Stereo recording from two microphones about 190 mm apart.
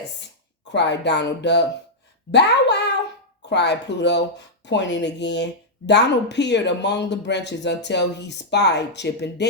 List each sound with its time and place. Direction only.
0.7 s speech: 65° left (ahead or behind)